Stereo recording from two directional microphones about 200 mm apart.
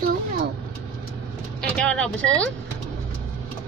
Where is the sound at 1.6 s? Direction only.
5° left (ahead or behind).